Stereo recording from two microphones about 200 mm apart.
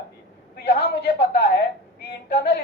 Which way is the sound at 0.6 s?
30° left (ahead or behind).